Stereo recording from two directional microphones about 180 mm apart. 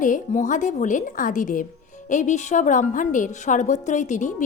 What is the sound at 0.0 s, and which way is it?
A woman's voice, 45° left (ahead or behind).